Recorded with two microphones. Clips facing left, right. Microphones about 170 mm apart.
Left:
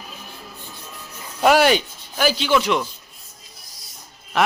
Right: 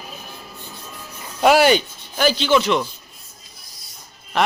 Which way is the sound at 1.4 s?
Centre (ahead or behind).